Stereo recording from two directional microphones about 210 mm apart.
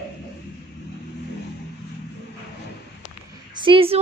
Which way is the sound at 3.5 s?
25° right (ahead or behind).